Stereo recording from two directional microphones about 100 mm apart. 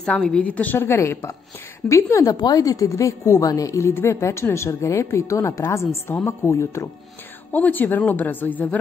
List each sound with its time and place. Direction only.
0.0 s a woman's voice: 10° left (ahead or behind); by 6.9 s 30° left (ahead or behind)
7.5 s a woman's voice: 15° left (ahead or behind)